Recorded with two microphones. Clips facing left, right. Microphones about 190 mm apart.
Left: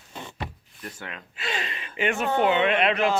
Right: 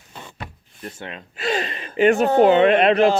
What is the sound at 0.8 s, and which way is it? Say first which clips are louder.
Speech: right 5 dB; 25° right (ahead or behind).